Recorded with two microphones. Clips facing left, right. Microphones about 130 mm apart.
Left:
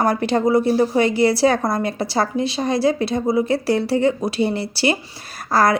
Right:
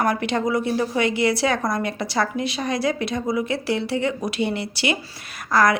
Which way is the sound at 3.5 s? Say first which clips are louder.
Left 5 dB; 40° left (ahead or behind).